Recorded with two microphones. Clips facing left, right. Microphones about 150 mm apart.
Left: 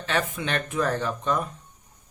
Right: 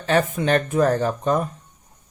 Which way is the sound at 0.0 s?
40° right (ahead or behind).